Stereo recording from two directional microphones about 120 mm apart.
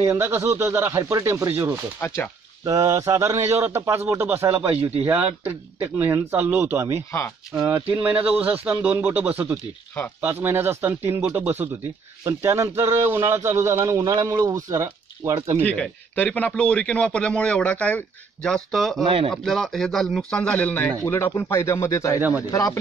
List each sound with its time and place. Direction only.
0.0 s a man's voice: 25° right (ahead or behind)
2.0 s speech: 20° left (ahead or behind)
2.6 s a man's voice: 30° right (ahead or behind)
7.1 s speech: 20° left (ahead or behind)
7.5 s a man's voice: 20° right (ahead or behind)
15.6 s a man's voice: 10° left (ahead or behind)
19.0 s speech: 50° right (ahead or behind)
19.3 s a man's voice: centre (ahead or behind); by 22.8 s 30° left (ahead or behind)